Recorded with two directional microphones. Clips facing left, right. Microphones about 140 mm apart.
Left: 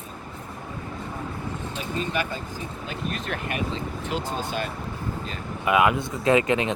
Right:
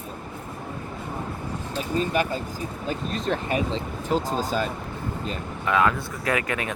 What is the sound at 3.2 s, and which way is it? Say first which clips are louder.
Speech: right 7 dB; 30° right (ahead or behind).